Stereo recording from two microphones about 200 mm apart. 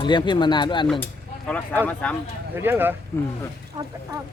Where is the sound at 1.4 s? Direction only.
5° left (ahead or behind).